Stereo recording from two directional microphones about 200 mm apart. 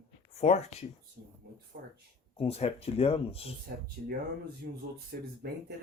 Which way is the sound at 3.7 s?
55° right (ahead or behind).